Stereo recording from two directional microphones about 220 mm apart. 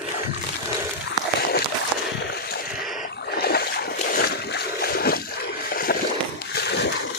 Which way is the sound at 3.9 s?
45° left (ahead or behind).